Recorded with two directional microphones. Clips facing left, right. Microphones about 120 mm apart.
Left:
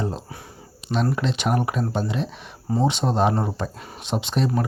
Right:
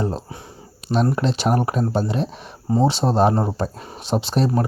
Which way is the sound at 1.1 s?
40° right (ahead or behind).